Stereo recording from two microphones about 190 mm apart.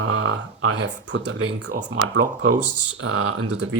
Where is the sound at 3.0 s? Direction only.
90° right.